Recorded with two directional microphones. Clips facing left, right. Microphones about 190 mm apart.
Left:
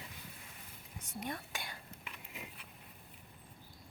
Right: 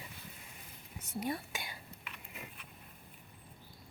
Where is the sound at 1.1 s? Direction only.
5° right (ahead or behind).